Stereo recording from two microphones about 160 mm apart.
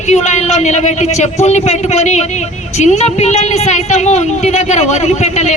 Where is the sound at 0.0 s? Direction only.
45° left (ahead or behind).